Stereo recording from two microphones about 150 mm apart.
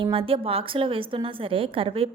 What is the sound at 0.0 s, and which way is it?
A woman's voice, 35° right (ahead or behind).